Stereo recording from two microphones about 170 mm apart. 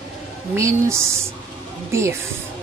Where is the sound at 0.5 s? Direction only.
15° right (ahead or behind).